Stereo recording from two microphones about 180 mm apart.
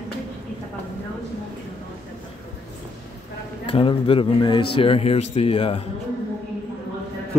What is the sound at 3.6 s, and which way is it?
Speech, 30° left (ahead or behind).